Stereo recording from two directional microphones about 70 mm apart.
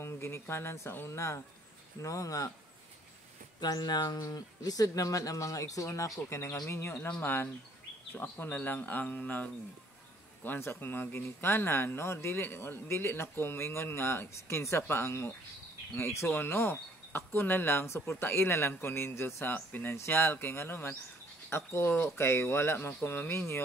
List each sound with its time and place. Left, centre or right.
0.0 s speech: left
2.0 s speech: left
3.6 s speech: left
6.7 s speech: left